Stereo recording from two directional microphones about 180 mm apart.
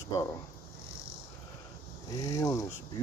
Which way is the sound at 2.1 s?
20° left (ahead or behind).